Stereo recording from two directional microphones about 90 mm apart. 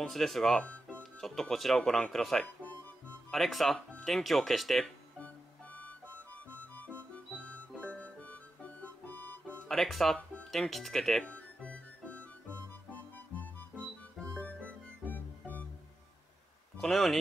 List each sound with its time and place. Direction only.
0.0 s speech: 5° left (ahead or behind)
2.4 s music: 20° left (ahead or behind)
3.3 s speech: centre (ahead or behind)
6.7 s music: 15° left (ahead or behind)
9.7 s speech: centre (ahead or behind)
11.2 s music: 15° left (ahead or behind)
16.8 s speech: centre (ahead or behind)